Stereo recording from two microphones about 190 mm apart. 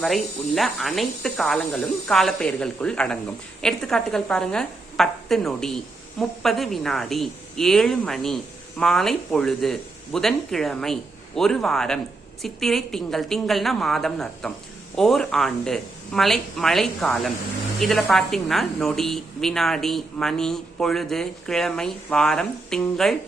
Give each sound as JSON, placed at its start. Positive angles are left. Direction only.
{"t": 0.0, "sound": "a woman's voice", "side_deg": 0}